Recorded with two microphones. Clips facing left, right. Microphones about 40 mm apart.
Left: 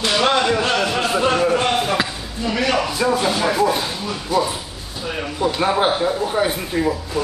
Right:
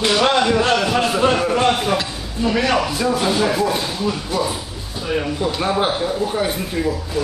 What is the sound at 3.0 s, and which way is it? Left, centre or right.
Speech, centre.